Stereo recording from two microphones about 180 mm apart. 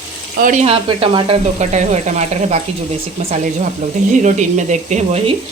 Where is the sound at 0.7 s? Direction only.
30° right (ahead or behind).